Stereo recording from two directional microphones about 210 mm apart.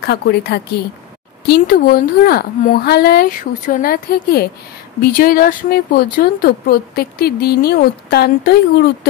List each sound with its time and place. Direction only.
0.0 s speech: 50° left (ahead or behind)